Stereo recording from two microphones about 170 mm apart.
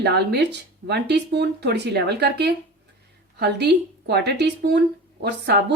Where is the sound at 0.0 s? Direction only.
75° right (ahead or behind).